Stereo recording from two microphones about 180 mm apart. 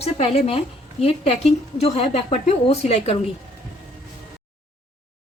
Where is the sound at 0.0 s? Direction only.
35° left (ahead or behind).